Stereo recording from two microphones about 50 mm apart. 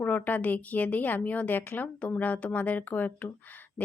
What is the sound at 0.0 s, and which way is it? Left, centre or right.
A woman's voice, left.